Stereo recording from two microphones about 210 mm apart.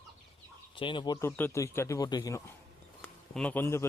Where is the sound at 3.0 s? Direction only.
5° left (ahead or behind).